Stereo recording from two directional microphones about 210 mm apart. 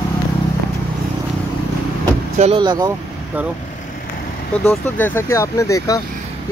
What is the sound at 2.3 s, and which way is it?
Speech, 30° right (ahead or behind).